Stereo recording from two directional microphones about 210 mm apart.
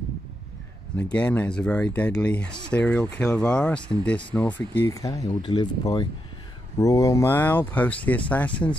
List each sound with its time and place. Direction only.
0.9 s speech: 5° left (ahead or behind)